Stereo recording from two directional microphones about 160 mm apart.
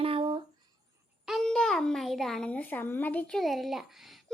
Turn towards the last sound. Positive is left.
turn(degrees=0)  # may be behind; listen again after turning